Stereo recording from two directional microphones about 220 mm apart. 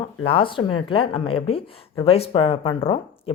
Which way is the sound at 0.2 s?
25° left (ahead or behind).